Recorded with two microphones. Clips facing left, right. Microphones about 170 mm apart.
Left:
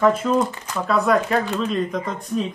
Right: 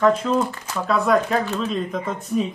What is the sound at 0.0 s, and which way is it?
Speech, 5° left (ahead or behind).